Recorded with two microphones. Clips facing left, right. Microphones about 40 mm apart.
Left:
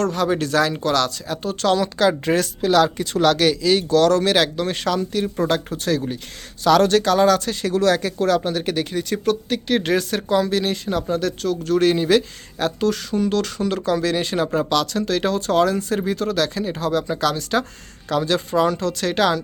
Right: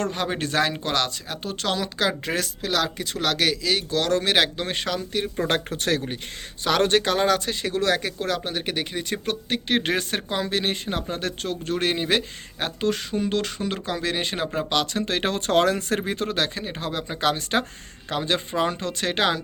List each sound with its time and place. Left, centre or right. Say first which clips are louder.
0.0 s speech: left 6 dB; right; by 4.0 s centre
4.0 s speech: left 1 dB; centre
4.4 s speech: left 5 dB; right
4.7 s speech: left 5 dB; centre
5.5 s speech: left 3 dB; right
6.7 s speech: left 5 dB; right
15.0 s speech: left 4 dB; right
16.0 s speech: left 4 dB; right
18.1 s speech: left 5 dB; right